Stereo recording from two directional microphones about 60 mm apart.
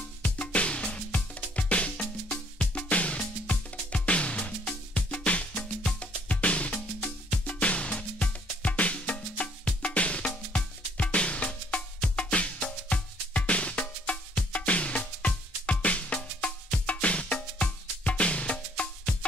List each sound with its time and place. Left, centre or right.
0.2 s music: left